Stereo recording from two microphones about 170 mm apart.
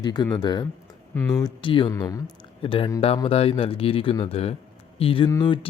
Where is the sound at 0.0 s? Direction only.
25° left (ahead or behind).